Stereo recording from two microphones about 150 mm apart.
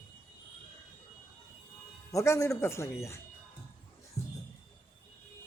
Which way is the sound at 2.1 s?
20° left (ahead or behind).